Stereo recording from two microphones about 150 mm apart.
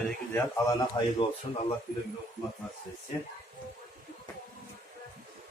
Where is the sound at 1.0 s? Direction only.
30° left (ahead or behind).